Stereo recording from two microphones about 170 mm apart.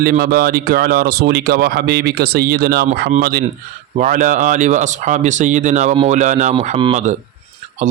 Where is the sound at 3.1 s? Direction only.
55° right (ahead or behind).